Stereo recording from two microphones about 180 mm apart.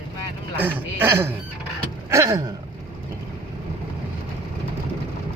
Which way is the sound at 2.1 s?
15° right (ahead or behind).